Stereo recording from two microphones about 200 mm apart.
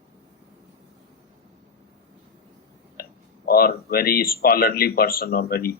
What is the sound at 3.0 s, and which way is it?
A man's voice, 50° left (ahead or behind).